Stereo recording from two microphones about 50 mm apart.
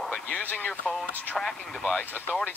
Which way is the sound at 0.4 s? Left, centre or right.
Left.